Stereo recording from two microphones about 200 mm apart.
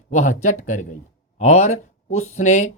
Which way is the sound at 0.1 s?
35° left (ahead or behind).